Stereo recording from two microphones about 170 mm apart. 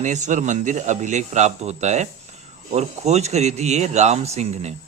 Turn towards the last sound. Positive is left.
turn(degrees=-40)  # may be behind; listen again after turning